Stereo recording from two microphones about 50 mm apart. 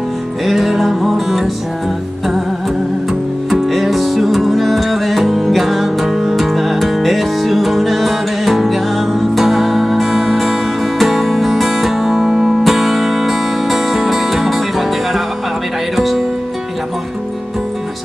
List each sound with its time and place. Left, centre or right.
0.5 s music: centre
3.1 s music: centre